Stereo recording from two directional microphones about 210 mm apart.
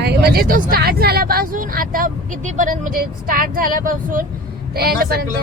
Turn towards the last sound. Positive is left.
turn(degrees=-45)  # may be behind; listen again after turning